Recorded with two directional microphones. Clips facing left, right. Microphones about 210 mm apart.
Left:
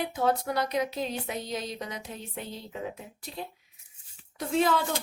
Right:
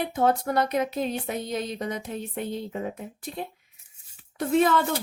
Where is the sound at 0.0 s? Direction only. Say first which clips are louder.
Right 4 dB; 50° right (ahead or behind).